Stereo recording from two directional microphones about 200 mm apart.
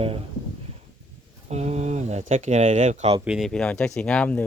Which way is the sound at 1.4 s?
35° right (ahead or behind).